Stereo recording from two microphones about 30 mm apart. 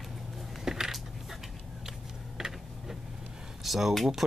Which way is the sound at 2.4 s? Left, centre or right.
Centre.